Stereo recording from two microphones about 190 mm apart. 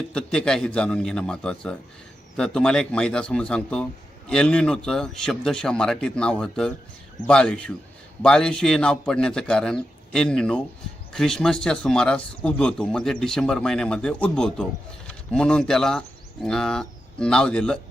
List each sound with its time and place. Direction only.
0.1 s speech: 5° left (ahead or behind)